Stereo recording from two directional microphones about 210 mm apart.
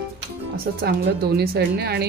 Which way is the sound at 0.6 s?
50° right (ahead or behind).